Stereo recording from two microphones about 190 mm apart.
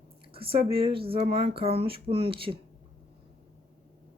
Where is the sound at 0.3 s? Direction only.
30° right (ahead or behind).